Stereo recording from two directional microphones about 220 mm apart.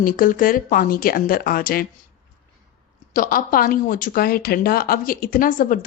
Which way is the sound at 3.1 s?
40° left (ahead or behind).